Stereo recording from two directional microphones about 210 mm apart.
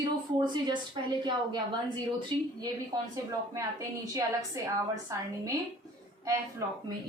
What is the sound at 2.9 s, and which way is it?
A woman's voice, 15° right (ahead or behind).